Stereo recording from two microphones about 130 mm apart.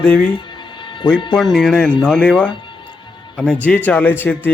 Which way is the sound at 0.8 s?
40° left (ahead or behind).